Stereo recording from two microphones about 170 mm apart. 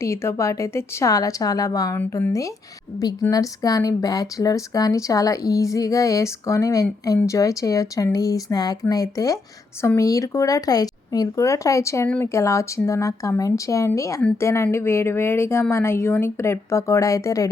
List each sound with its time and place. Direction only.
0.0 s speech: 15° left (ahead or behind)